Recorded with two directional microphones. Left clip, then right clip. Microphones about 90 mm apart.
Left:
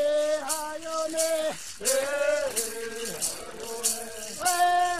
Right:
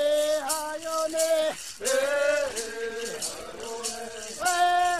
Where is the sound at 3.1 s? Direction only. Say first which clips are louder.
Even; 15° right (ahead or behind).